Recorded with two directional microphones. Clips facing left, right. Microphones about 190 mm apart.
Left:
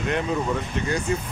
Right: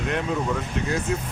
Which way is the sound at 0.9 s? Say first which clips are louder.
Left 1 dB; centre (ahead or behind).